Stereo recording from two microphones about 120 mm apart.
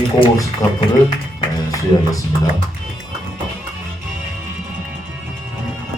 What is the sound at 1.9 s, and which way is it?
Speech, 35° left (ahead or behind).